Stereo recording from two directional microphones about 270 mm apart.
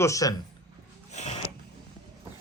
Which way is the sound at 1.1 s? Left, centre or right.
Left.